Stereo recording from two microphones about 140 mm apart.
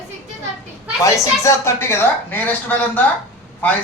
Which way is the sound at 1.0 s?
20° left (ahead or behind).